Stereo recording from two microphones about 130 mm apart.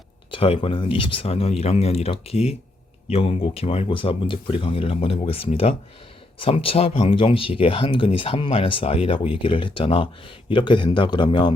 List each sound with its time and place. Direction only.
0.3 s speech: 45° left (ahead or behind)